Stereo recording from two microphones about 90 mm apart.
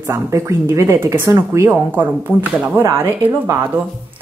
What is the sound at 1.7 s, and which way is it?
Speech, 20° right (ahead or behind).